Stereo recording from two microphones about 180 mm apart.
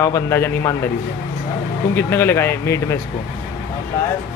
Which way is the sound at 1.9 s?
10° left (ahead or behind).